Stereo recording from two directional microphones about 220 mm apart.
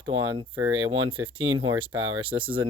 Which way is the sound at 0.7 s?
70° right (ahead or behind).